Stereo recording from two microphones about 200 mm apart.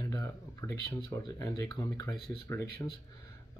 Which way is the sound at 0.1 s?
15° left (ahead or behind).